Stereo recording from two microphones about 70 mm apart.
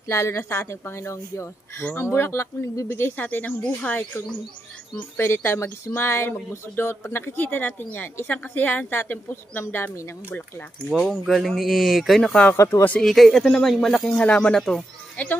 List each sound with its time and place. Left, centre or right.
0.1 s speech: left
2.9 s speech: left
5.1 s speech: left
10.9 s speech: centre
12.5 s speech: left
13.0 s speech: centre
14.2 s speech: centre
14.5 s speech: centre
14.8 s speech: left